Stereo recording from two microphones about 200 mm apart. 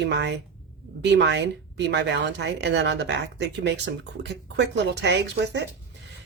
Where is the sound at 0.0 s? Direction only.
60° right (ahead or behind).